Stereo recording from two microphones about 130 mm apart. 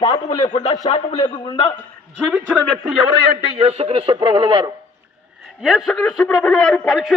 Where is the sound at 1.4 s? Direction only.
35° left (ahead or behind).